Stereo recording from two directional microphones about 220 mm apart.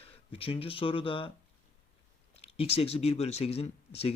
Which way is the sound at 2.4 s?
25° left (ahead or behind).